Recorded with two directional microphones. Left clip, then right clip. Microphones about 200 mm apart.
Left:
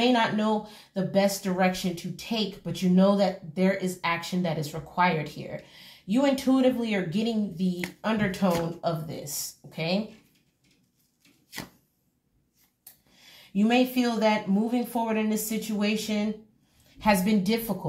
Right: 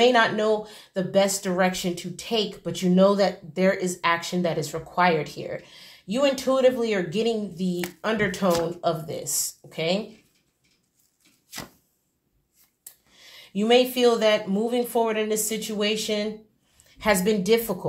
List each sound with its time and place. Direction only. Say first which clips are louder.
0.0 s speech: right 5 dB; 30° right (ahead or behind)
13.5 s speech: right 5 dB; 35° right (ahead or behind)